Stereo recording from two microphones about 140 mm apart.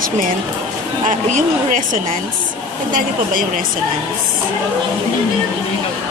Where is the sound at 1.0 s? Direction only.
70° right (ahead or behind).